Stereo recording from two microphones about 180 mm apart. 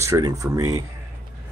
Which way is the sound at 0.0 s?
20° right (ahead or behind).